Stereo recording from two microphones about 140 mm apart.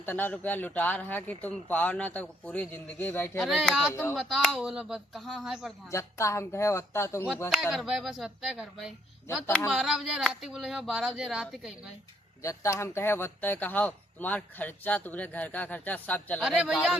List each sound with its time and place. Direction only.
0.0 s speech: 15° left (ahead or behind)
3.4 s speech: centre (ahead or behind)
5.9 s speech: 20° left (ahead or behind)
7.7 s speech: 5° right (ahead or behind)
12.4 s speech: 20° left (ahead or behind)
16.4 s speech: 5° right (ahead or behind)